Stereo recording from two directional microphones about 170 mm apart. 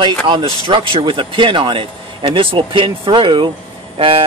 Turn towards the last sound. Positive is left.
turn(degrees=-30)  # may be behind; listen again after turning